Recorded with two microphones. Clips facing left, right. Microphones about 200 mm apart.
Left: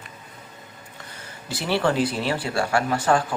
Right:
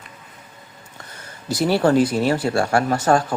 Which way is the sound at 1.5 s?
40° right (ahead or behind).